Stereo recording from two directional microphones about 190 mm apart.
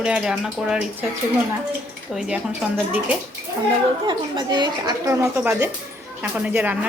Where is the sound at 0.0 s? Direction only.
5° right (ahead or behind).